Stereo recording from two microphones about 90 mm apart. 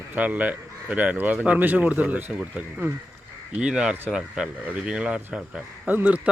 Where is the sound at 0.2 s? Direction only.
15° right (ahead or behind).